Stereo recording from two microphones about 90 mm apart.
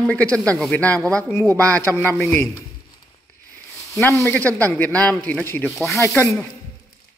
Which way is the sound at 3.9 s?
35° left (ahead or behind).